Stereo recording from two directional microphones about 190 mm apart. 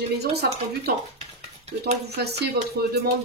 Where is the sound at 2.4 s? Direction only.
55° right (ahead or behind).